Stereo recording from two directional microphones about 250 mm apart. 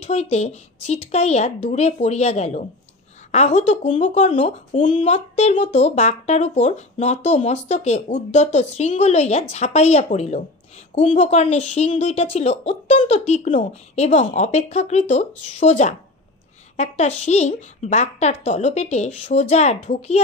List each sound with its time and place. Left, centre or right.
0.0 s speech: left